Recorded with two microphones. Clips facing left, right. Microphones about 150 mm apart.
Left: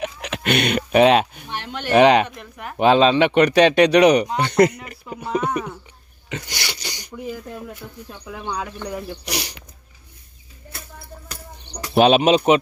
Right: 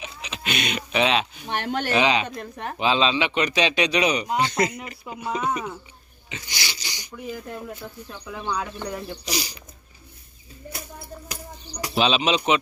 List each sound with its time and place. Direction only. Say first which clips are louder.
0.0 s a sound: left 8 dB; 65° left (ahead or behind)
1.5 s speech: right 4 dB; 50° right (ahead or behind)
1.9 s speech: left 9 dB; 55° left (ahead or behind)
2.2 s speech: right 2 dB; 30° right (ahead or behind)
2.8 s speech: left 8 dB; 55° left (ahead or behind)
5.0 s speech: left 4 dB; 10° right (ahead or behind)
6.2 s speech: left 5 dB; 60° left (ahead or behind)
8.1 s speech: even; 10° left (ahead or behind)
9.2 s speech: left 1 dB; 65° left (ahead or behind)
11.9 s speech: left 8 dB; 55° left (ahead or behind)